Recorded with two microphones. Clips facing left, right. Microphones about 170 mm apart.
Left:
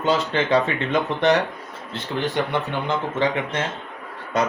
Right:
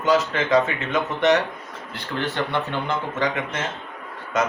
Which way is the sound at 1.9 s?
15° left (ahead or behind).